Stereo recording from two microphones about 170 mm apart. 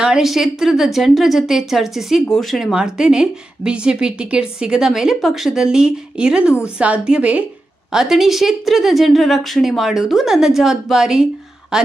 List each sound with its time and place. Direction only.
0.0 s a woman's voice: 5° right (ahead or behind)